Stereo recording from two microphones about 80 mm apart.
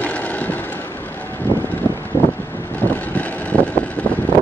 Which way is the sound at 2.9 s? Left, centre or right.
Centre.